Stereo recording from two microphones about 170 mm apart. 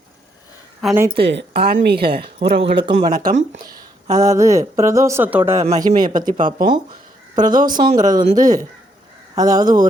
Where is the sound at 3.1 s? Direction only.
60° right (ahead or behind).